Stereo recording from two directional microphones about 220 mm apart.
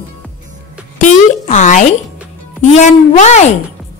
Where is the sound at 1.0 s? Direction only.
35° left (ahead or behind).